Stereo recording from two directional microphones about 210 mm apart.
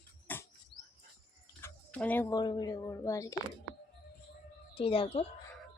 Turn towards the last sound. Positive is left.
turn(degrees=25)  # may be behind; listen again after turning